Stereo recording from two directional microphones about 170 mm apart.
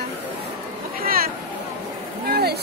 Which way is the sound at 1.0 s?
60° right (ahead or behind).